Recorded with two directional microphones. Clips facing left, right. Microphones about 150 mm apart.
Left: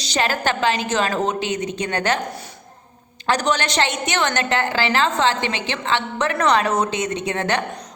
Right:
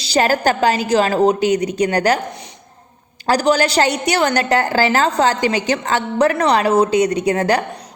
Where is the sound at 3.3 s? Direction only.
35° right (ahead or behind).